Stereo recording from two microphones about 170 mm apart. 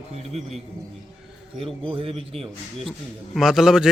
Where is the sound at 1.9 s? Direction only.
35° right (ahead or behind).